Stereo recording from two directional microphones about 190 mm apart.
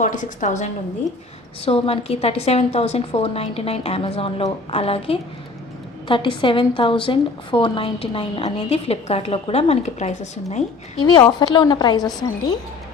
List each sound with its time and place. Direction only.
0.0 s a woman's voice: 40° left (ahead or behind)
11.0 s a woman's voice: 25° left (ahead or behind)